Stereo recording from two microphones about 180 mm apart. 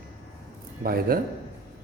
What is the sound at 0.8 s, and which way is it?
Speech, 55° right (ahead or behind).